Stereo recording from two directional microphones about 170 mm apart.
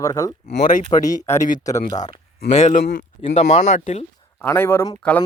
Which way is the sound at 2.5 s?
45° left (ahead or behind).